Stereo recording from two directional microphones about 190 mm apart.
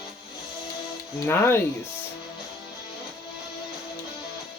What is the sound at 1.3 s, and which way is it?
Speech, 10° left (ahead or behind).